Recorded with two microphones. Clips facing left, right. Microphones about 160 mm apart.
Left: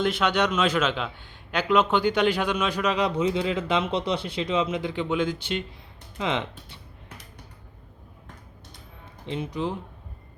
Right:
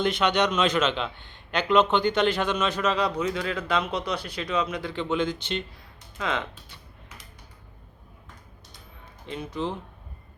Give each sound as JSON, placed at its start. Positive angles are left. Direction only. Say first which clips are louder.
{"t": 0.0, "sound": "a man's voice", "louder": "even", "side_deg": 5}
{"t": 6.1, "sound": "speech", "louder": "left 2 dB", "side_deg": 20}
{"t": 9.2, "sound": "speech", "louder": "left 2 dB", "side_deg": 20}